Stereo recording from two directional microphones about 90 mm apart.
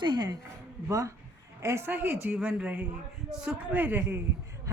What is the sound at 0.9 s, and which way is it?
A man's voice, 35° right (ahead or behind).